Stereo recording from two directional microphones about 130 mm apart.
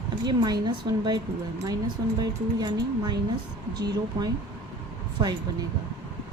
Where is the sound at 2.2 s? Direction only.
30° right (ahead or behind).